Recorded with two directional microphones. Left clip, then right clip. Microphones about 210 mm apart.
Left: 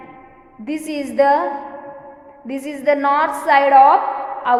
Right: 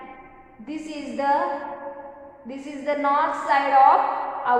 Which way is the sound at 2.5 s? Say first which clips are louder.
Left 9 dB; 50° left (ahead or behind).